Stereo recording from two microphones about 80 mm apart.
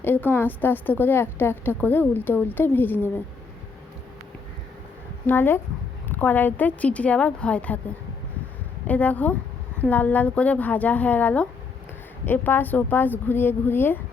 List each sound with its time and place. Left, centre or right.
0.0 s a woman's voice: left
5.2 s a woman's voice: left
8.9 s a woman's voice: centre